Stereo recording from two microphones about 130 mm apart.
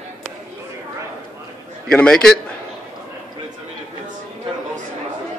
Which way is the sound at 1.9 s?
5° left (ahead or behind).